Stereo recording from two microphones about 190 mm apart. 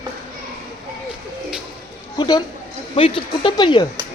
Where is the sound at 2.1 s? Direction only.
20° left (ahead or behind).